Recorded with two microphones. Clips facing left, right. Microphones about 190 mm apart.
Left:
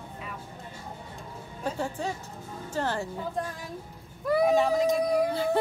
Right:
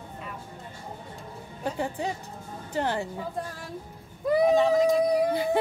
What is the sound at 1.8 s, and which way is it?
A woman's voice, 15° right (ahead or behind).